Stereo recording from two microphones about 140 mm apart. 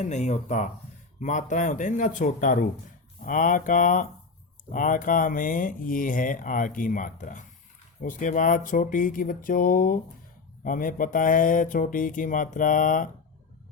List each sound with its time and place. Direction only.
0.0 s speech: 55° left (ahead or behind)